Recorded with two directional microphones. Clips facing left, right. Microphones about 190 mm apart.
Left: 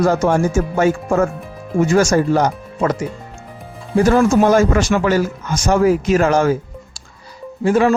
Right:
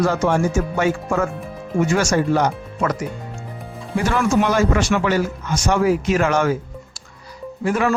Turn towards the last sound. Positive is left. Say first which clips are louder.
# left 5 dB
turn(degrees=30)  # may be behind; listen again after turning